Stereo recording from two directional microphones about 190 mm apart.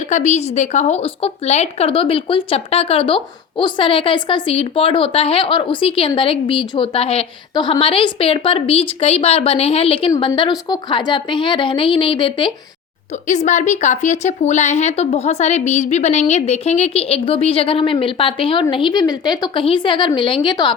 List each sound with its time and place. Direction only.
0.1 s speech: 35° left (ahead or behind)
13.2 s a woman's voice: 40° left (ahead or behind); by 20.7 s 25° left (ahead or behind)